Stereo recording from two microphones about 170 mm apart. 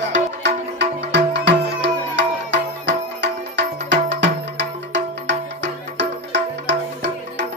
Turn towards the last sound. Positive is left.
turn(degrees=-90)